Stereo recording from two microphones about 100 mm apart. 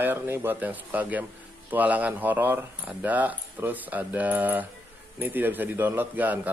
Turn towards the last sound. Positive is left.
turn(degrees=-15)  # may be behind; listen again after turning